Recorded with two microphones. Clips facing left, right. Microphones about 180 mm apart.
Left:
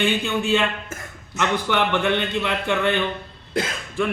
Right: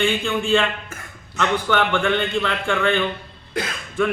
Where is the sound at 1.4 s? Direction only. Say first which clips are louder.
Right 1 dB; 20° left (ahead or behind).